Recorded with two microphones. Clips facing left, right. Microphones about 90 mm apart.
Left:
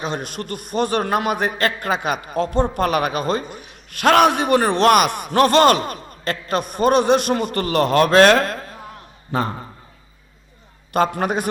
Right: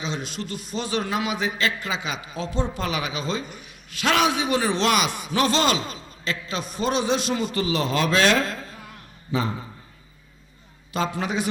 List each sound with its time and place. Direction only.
0.0 s a man's voice: 55° left (ahead or behind)
10.9 s a man's voice: 55° left (ahead or behind)